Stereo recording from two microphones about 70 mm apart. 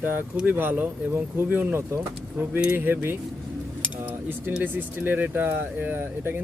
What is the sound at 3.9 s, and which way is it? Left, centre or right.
Cutlery, right.